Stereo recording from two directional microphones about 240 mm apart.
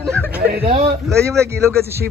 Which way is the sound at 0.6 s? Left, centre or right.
Right.